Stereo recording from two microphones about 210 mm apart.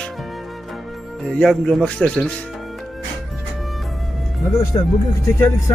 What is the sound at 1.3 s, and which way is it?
A man's voice, centre (ahead or behind).